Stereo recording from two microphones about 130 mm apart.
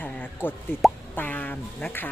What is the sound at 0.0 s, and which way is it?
Plop, 15° left (ahead or behind).